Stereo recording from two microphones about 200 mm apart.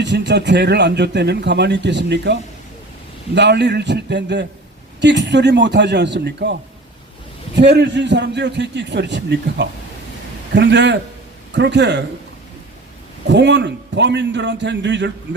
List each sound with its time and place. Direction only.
0.0 s a man's voice: 60° right (ahead or behind)
13.2 s a man's voice: 60° right (ahead or behind)